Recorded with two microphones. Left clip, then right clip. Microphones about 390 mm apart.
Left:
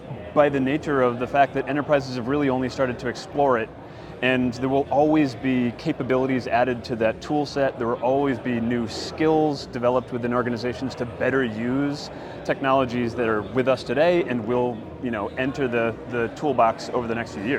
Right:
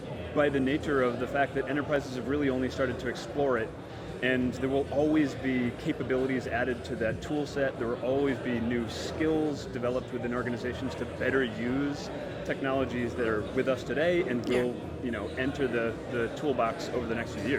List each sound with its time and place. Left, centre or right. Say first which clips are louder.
0.3 s speech: left 7 dB; centre